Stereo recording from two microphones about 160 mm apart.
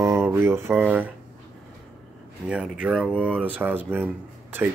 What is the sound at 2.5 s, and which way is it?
Speech, 5° right (ahead or behind).